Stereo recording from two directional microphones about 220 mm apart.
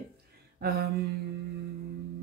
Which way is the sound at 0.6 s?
45° right (ahead or behind).